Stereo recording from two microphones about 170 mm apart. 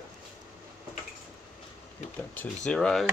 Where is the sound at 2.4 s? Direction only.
5° left (ahead or behind).